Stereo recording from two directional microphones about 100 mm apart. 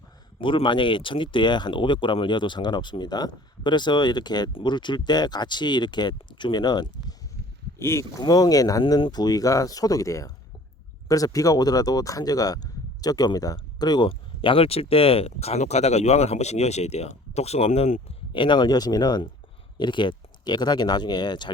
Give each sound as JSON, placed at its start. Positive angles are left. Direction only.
{"t": 0.4, "sound": "speech", "side_deg": 55}
{"t": 7.8, "sound": "speech", "side_deg": 25}
{"t": 8.2, "sound": "speech", "side_deg": 40}
{"t": 9.0, "sound": "speech", "side_deg": 60}
{"t": 9.2, "sound": "speech", "side_deg": 35}
{"t": 14.1, "sound": "speech", "side_deg": 65}
{"t": 18.3, "sound": "speech", "side_deg": 50}